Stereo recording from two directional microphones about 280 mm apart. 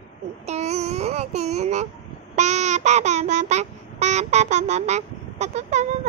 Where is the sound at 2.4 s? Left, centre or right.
Right.